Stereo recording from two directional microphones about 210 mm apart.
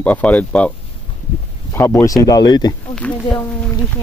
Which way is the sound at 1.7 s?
10° left (ahead or behind).